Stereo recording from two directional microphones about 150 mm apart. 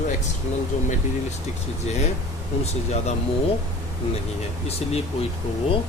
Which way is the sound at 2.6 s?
45° left (ahead or behind).